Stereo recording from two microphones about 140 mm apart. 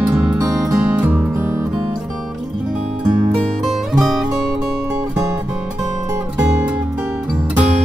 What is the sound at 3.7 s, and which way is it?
Music, centre (ahead or behind).